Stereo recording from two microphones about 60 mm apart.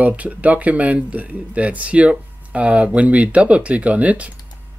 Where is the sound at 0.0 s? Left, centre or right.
Right.